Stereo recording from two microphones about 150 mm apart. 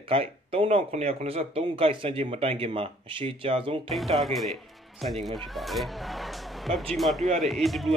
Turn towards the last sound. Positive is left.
turn(degrees=0)  # may be behind; listen again after turning